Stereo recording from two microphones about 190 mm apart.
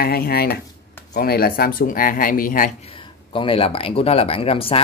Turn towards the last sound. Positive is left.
turn(degrees=30)  # may be behind; listen again after turning